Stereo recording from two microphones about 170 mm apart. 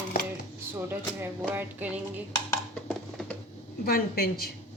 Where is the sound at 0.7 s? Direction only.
10° right (ahead or behind).